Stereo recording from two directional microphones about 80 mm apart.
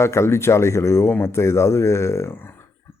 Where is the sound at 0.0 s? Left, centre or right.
Left.